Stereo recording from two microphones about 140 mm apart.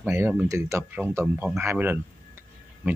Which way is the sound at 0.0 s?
15° right (ahead or behind).